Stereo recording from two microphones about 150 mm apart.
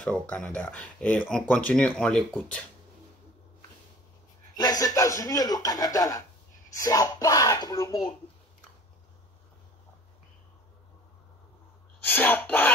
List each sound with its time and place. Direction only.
0.0 s speech: 10° left (ahead or behind)
4.6 s speech: 25° left (ahead or behind)
12.1 s speech: 15° left (ahead or behind)